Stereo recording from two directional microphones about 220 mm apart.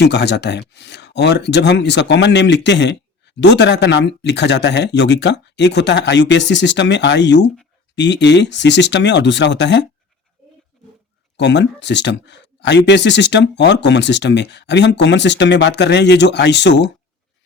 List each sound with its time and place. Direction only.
0.0 s speech: 50° left (ahead or behind)
11.3 s speech: 50° left (ahead or behind)